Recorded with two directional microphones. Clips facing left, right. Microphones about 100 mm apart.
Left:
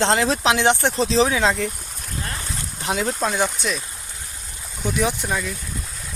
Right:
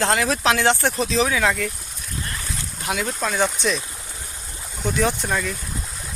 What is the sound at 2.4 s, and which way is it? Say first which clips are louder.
Boat: left 1 dB; 25° left (ahead or behind).